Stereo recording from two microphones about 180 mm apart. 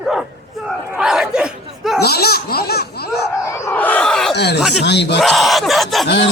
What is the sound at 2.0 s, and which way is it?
Speech, 60° left (ahead or behind).